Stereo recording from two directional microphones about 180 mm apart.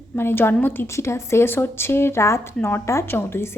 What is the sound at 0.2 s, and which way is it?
A woman's voice, 10° left (ahead or behind).